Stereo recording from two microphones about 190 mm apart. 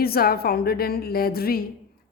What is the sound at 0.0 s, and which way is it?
A woman's voice, 55° left (ahead or behind).